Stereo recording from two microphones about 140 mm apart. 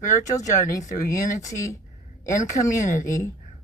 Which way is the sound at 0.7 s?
25° left (ahead or behind).